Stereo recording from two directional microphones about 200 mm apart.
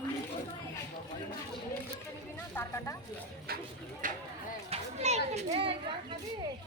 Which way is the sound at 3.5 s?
50° right (ahead or behind).